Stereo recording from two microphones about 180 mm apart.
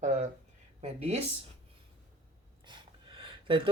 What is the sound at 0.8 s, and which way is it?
Speech, 35° right (ahead or behind).